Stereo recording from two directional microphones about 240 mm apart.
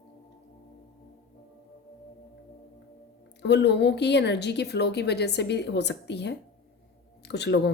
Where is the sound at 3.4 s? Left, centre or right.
Left.